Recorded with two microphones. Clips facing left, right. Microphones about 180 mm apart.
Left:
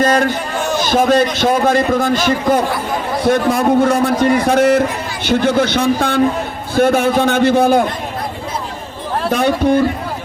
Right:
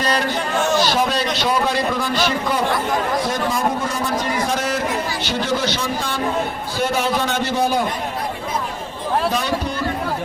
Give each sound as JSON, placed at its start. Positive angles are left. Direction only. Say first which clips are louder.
{"t": 0.0, "sound": "a sound", "louder": "left 7 dB", "side_deg": 50}
{"t": 0.8, "sound": "a man's voice", "louder": "left 6 dB", "side_deg": 50}
{"t": 3.2, "sound": "a man's voice", "louder": "left 8 dB", "side_deg": 60}
{"t": 9.3, "sound": "a man's voice", "louder": "left 9 dB", "side_deg": 55}